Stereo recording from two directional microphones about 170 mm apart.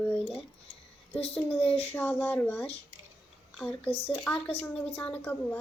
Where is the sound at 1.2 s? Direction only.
35° left (ahead or behind).